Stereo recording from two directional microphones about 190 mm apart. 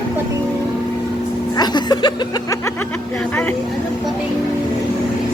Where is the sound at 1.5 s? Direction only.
20° left (ahead or behind).